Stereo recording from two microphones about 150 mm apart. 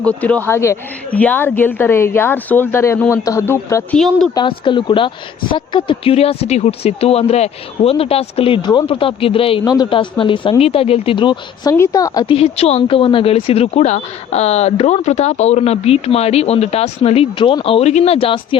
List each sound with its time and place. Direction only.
0.0 s a woman's voice: 10° left (ahead or behind)
3.9 s speech: 5° left (ahead or behind)
4.4 s speech: 35° left (ahead or behind)